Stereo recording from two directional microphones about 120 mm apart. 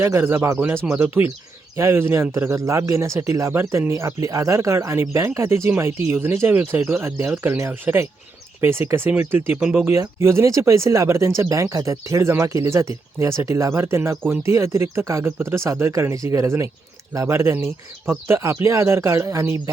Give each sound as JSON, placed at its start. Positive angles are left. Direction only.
{"t": 0.0, "sound": "speech", "side_deg": -20}